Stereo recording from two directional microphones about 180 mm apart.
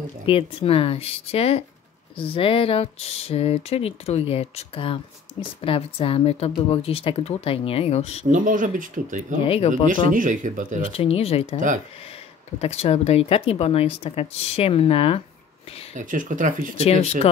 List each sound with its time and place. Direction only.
0.3 s speech: 30° left (ahead or behind)
8.3 s speech: 45° right (ahead or behind)
9.5 s speech: 30° left (ahead or behind)
9.8 s speech: 45° right (ahead or behind)
10.9 s speech: 35° left (ahead or behind)
15.9 s speech: 45° right (ahead or behind)
16.7 s speech: 35° left (ahead or behind)